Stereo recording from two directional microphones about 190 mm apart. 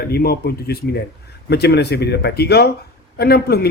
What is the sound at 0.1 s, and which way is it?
A man's voice, 55° left (ahead or behind).